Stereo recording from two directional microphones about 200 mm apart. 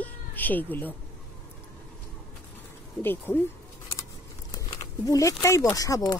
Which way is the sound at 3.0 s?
10° left (ahead or behind).